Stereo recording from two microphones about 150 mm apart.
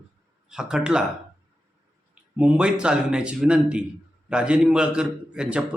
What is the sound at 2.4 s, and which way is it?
A man's voice, 10° right (ahead or behind).